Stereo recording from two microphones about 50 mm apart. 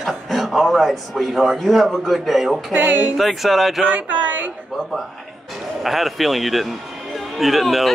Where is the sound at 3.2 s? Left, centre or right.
Centre.